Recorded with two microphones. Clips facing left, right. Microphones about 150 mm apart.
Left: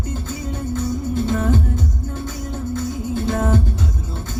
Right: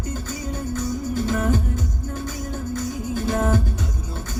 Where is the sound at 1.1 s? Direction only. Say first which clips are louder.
Left 2 dB; 25° left (ahead or behind).